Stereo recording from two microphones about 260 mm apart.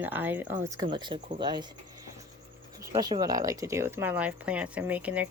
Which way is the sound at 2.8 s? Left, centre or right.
Centre.